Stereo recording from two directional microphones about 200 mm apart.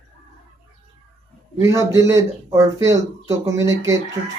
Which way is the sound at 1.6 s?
15° right (ahead or behind).